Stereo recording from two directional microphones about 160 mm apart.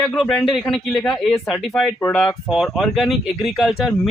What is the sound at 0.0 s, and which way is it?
Speech, 5° left (ahead or behind).